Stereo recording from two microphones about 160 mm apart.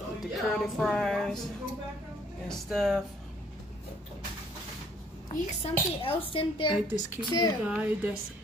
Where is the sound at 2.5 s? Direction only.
Centre (ahead or behind).